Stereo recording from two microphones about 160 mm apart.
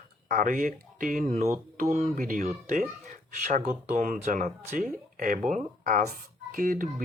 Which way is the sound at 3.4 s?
50° right (ahead or behind).